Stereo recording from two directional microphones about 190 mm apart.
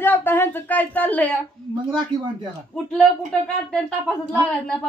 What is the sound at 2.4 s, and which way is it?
Speech, centre (ahead or behind).